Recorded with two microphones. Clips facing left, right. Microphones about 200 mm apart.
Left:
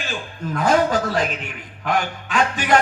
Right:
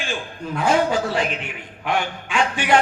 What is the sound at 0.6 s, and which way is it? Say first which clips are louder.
Music: left 1 dB; 40° left (ahead or behind).